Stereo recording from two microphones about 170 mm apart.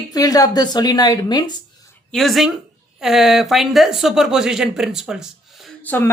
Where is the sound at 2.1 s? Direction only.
Centre (ahead or behind).